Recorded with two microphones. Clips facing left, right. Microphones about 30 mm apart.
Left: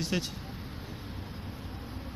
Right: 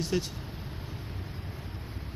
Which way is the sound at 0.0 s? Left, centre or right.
Left.